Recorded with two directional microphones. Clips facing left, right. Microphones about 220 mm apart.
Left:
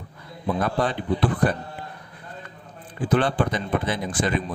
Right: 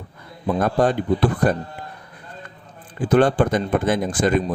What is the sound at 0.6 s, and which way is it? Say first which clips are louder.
Speech: right 7 dB; 45° right (ahead or behind).